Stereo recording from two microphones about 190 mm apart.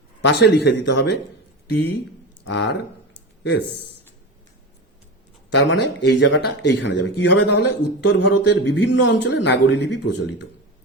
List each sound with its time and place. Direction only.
0.2 s speech: 60° left (ahead or behind)
3.4 s speech: 60° left (ahead or behind)
5.5 s a man's voice: 65° left (ahead or behind)